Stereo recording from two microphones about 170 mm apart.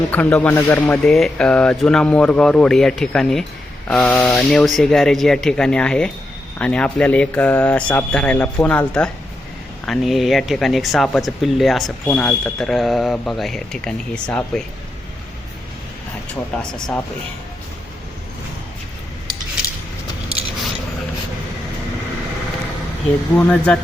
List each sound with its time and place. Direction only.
0.1 s speech: 10° left (ahead or behind)
16.7 s speech: 5° left (ahead or behind)
23.3 s speech: 5° left (ahead or behind)